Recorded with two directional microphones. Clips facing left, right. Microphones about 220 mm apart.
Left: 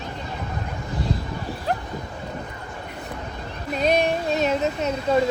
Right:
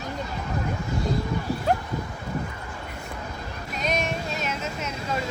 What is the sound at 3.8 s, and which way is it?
Female singing, 35° left (ahead or behind).